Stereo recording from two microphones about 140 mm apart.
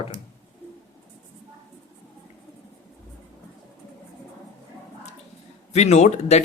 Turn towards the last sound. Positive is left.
turn(degrees=55)  # may be behind; listen again after turning